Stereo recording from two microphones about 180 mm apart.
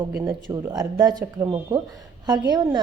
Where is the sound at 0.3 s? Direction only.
20° right (ahead or behind).